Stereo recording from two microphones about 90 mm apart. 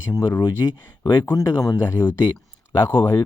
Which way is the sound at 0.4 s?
50° left (ahead or behind).